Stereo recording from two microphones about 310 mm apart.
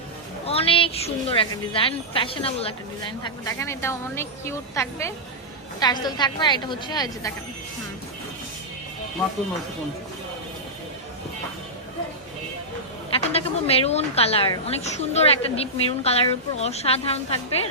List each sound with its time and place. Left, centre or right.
0.4 s a woman's voice: centre
13.1 s a woman's voice: centre